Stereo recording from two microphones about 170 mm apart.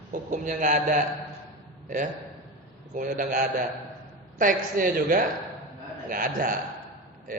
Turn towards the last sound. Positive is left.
turn(degrees=-55)  # may be behind; listen again after turning